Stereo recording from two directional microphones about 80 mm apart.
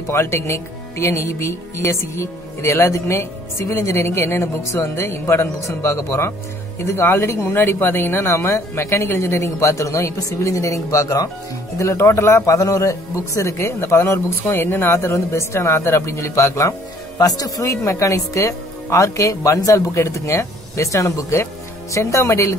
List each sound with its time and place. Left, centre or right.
0.1 s speech: left
12.5 s speech: left
17.2 s speech: left